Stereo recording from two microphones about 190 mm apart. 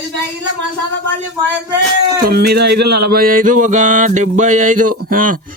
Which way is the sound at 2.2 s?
55° right (ahead or behind).